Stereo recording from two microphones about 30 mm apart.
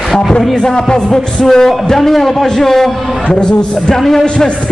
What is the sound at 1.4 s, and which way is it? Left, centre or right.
A man's voice, centre.